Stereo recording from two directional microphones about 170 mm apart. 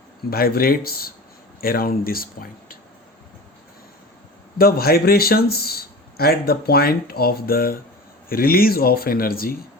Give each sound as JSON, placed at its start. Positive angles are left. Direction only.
{"t": 0.3, "sound": "speech", "side_deg": 60}
{"t": 4.5, "sound": "speech", "side_deg": 60}